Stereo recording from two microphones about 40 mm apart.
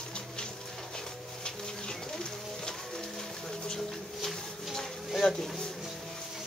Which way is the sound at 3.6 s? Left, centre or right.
Centre.